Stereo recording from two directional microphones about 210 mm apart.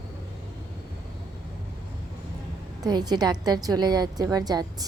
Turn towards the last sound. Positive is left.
turn(degrees=-20)  # may be behind; listen again after turning